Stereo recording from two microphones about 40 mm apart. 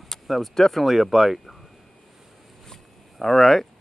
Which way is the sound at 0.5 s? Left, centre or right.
Centre.